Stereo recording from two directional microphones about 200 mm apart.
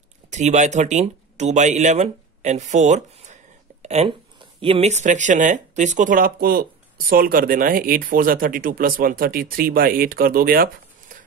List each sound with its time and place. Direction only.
0.3 s speech: 35° right (ahead or behind)